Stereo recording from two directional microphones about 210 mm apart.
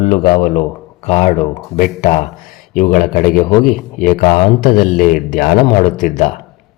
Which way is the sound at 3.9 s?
40° left (ahead or behind).